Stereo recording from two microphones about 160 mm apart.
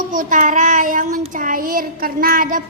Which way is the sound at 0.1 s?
55° right (ahead or behind).